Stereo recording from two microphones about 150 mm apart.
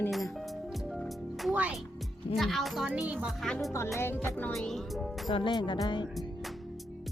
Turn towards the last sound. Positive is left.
turn(degrees=30)  # may be behind; listen again after turning